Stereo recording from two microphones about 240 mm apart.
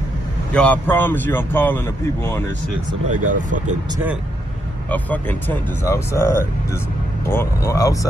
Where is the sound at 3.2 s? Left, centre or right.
Right.